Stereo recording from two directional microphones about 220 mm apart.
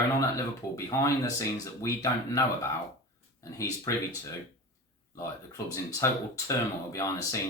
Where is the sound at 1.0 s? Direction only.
15° left (ahead or behind).